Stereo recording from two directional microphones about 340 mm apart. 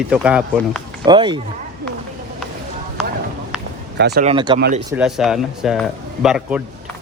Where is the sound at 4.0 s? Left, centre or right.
Right.